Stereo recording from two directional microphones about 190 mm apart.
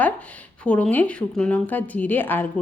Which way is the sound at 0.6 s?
5° left (ahead or behind).